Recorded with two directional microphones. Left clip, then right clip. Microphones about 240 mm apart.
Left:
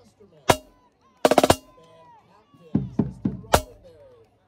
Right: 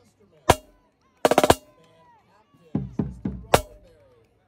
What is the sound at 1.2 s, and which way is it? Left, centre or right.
Drum, centre.